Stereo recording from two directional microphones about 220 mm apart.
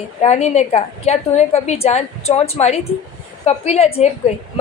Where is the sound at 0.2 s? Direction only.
30° left (ahead or behind).